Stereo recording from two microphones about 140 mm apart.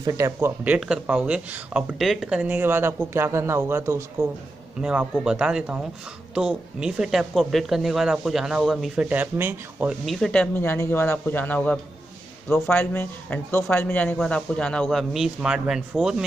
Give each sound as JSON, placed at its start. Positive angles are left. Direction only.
{"t": 0.0, "sound": "speech", "side_deg": -25}
{"t": 0.7, "sound": "speech", "side_deg": -5}
{"t": 4.8, "sound": "speech", "side_deg": -5}
{"t": 10.0, "sound": "speech", "side_deg": 0}